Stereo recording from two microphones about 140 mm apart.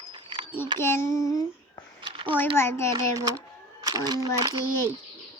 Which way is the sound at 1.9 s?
35° right (ahead or behind).